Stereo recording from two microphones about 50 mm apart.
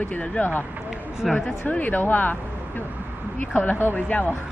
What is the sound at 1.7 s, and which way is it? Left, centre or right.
Speech, left.